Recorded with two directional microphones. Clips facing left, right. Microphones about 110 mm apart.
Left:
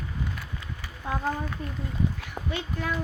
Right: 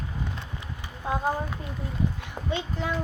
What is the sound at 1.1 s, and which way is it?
Speech, 15° right (ahead or behind).